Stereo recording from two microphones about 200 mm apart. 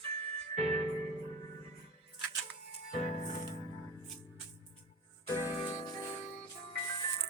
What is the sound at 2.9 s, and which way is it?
Music, 40° left (ahead or behind).